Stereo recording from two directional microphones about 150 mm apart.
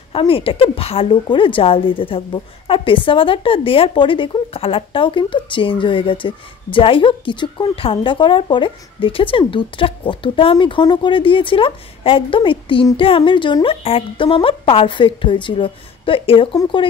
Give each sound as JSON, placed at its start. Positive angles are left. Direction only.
{"t": 0.1, "sound": "a woman's voice", "side_deg": 35}